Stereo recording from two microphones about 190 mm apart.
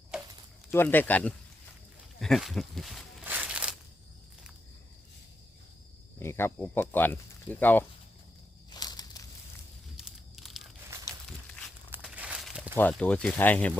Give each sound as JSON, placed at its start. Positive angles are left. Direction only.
{"t": 0.1, "sound": "a sound", "side_deg": -5}
{"t": 0.7, "sound": "speech", "side_deg": 10}
{"t": 2.2, "sound": "walk", "side_deg": 0}
{"t": 6.1, "sound": "speech", "side_deg": 15}
{"t": 8.7, "sound": "walk", "side_deg": 20}
{"t": 10.0, "sound": "a sound", "side_deg": 0}
{"t": 11.9, "sound": "crumpling", "side_deg": -5}
{"t": 12.7, "sound": "speech", "side_deg": 5}